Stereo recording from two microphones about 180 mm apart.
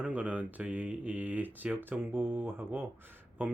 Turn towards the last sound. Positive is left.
turn(degrees=-10)  # may be behind; listen again after turning